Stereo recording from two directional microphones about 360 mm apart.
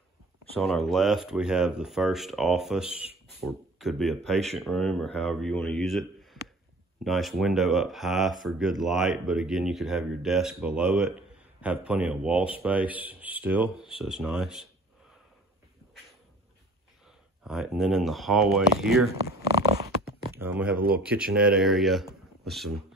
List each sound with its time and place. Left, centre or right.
0.6 s speech: centre
7.1 s speech: centre
17.4 s speech: centre
19.6 s zipper: centre
20.3 s speech: centre
20.7 s speech: right
21.0 s speech: centre